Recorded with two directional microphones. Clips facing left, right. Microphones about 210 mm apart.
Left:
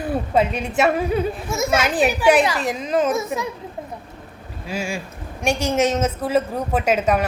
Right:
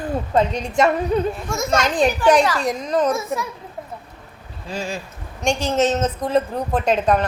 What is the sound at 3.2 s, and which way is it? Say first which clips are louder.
Speech: left 1 dB; 15° left (ahead or behind).